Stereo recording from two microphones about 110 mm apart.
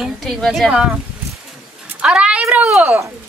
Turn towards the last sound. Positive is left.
turn(degrees=-20)  # may be behind; listen again after turning